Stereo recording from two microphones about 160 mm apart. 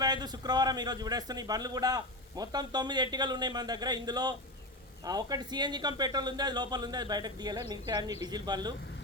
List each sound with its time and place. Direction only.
0.0 s a man's voice: 25° right (ahead or behind)